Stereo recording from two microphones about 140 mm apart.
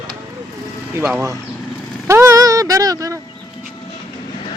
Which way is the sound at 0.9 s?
15° right (ahead or behind).